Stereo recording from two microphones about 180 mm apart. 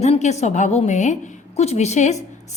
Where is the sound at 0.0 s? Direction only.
40° left (ahead or behind).